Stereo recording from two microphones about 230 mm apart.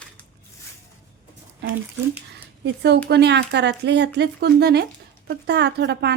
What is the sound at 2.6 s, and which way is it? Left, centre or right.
A woman's voice, right.